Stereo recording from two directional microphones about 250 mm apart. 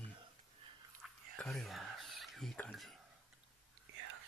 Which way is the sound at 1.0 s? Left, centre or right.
Centre.